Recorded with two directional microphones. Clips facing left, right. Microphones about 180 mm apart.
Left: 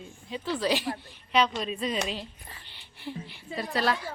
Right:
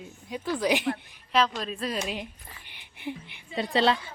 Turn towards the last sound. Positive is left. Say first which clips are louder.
# right 4 dB
turn(degrees=-25)  # may be behind; listen again after turning